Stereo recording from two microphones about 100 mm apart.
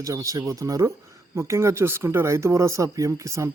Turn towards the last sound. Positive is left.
turn(degrees=-30)  # may be behind; listen again after turning